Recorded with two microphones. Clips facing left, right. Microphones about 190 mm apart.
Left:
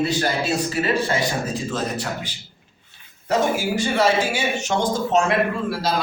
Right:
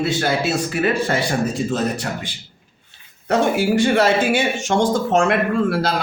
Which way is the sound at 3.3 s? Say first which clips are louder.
Right 4 dB; 65° right (ahead or behind).